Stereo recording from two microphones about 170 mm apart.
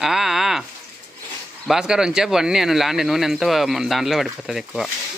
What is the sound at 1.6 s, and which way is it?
Speech, 5° right (ahead or behind).